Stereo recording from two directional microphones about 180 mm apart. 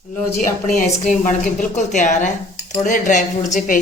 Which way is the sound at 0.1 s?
45° left (ahead or behind).